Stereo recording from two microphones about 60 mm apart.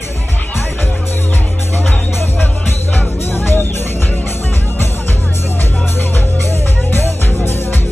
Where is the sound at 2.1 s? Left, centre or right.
Left.